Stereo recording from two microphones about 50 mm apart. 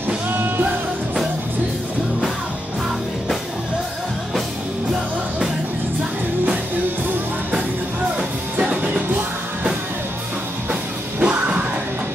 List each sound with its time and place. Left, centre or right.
0.3 s music: right
8.5 s music: right